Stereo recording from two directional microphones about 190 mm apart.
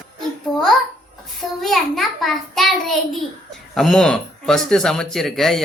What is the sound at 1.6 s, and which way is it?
Child singing, centre (ahead or behind).